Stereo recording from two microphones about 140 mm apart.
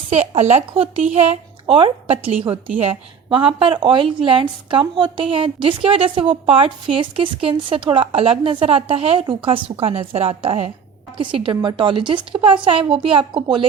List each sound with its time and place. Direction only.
0.1 s a woman's voice: 50° right (ahead or behind)
1.3 s a woman's voice: 40° right (ahead or behind)